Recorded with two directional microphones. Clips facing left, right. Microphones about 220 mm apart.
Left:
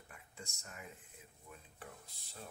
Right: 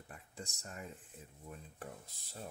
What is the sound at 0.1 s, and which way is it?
Speech, 35° right (ahead or behind).